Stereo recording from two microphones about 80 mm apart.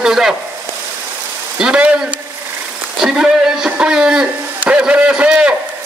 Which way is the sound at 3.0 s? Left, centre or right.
Centre.